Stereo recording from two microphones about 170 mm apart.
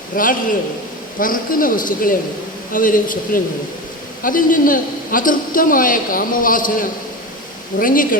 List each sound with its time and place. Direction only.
0.2 s a man's voice: 55° left (ahead or behind)